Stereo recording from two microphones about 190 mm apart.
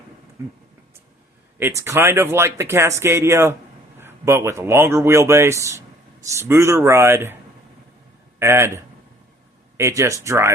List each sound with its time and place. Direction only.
0.4 s speech: 15° right (ahead or behind)
1.5 s speech: 10° right (ahead or behind)
8.4 s speech: 15° right (ahead or behind)